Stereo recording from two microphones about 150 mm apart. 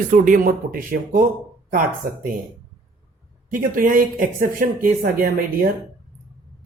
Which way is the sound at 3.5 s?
65° right (ahead or behind).